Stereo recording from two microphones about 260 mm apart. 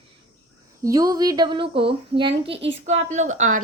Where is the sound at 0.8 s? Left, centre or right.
Centre.